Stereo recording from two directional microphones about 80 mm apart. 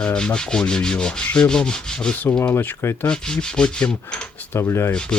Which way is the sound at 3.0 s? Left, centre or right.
Centre.